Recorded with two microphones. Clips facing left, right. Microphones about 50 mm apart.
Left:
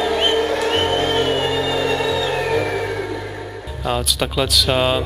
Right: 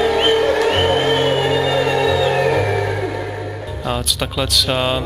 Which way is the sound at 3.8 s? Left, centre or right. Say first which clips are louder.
Left 1 dB; centre.